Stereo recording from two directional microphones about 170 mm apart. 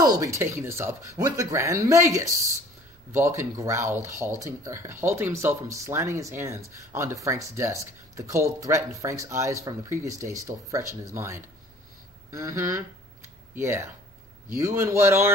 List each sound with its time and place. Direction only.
0.0 s speech: 20° right (ahead or behind)
12.3 s a sound: 20° right (ahead or behind)
14.6 s speech: 20° right (ahead or behind)